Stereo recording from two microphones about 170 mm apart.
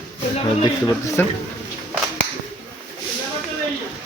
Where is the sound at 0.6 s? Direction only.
20° left (ahead or behind).